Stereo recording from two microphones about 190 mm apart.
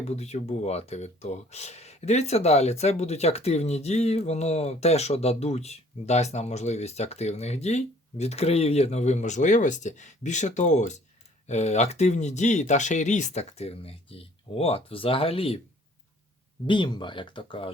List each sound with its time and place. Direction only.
0.0 s speech: 35° left (ahead or behind)
16.6 s speech: 25° left (ahead or behind)